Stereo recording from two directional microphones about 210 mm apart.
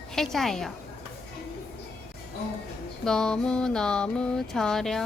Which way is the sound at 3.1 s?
5° left (ahead or behind).